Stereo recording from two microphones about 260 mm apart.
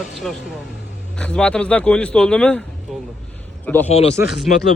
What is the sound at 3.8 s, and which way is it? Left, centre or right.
Speech, left.